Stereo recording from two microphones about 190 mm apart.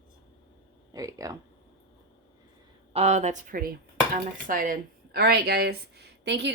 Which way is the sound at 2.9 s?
35° right (ahead or behind).